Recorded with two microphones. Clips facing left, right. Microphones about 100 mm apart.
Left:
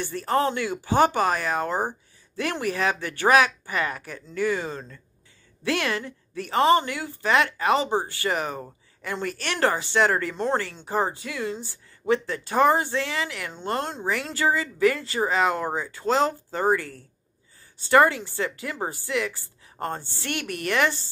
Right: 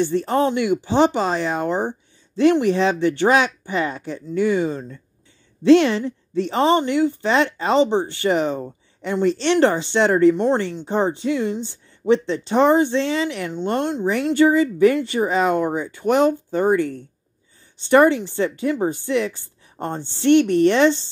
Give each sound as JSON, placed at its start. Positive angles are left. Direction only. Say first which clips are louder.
{"t": 0.0, "sound": "speech", "louder": "right 5 dB", "side_deg": -20}